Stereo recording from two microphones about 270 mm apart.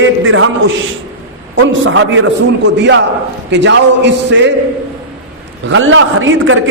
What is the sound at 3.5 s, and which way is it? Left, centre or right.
A man's voice, right.